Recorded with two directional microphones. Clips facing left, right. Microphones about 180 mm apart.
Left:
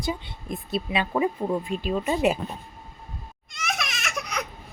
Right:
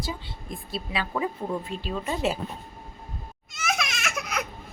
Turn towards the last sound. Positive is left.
turn(degrees=0)  # may be behind; listen again after turning